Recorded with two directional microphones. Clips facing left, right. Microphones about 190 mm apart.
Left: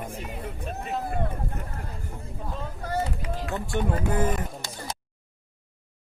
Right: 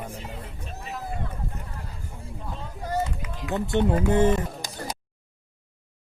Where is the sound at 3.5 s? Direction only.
20° right (ahead or behind).